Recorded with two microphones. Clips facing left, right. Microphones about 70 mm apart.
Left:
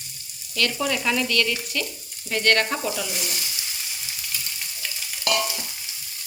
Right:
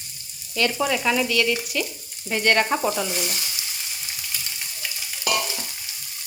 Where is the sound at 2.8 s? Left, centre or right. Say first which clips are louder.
Right 4 dB; right.